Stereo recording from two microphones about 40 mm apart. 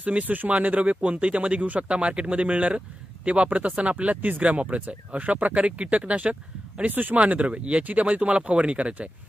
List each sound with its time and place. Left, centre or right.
0.0 s speech: right
6.9 s speech: right
7.2 s speech: right